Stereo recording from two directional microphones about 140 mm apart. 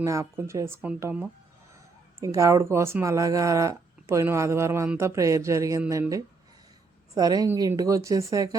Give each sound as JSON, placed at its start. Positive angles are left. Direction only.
{"t": 0.0, "sound": "speech", "side_deg": -20}
{"t": 2.2, "sound": "speech", "side_deg": -20}